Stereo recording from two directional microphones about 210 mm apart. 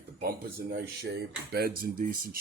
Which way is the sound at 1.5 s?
50° right (ahead or behind).